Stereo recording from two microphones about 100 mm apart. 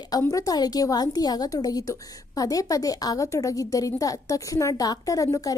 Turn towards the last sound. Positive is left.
turn(degrees=35)  # may be behind; listen again after turning